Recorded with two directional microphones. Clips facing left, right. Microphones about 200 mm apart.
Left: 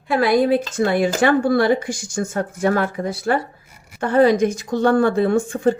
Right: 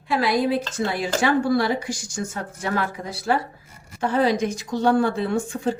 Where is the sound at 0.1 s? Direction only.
55° left (ahead or behind).